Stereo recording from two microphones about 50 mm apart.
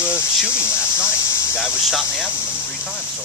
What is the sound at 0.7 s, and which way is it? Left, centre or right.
Cricket, right.